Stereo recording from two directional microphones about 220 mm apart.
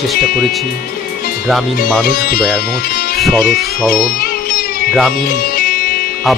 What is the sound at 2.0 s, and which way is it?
Speech, 40° left (ahead or behind).